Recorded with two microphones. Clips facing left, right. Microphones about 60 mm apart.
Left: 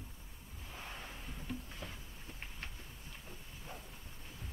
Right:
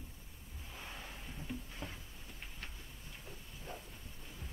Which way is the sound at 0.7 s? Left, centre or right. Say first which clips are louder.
Left 1 dB; left.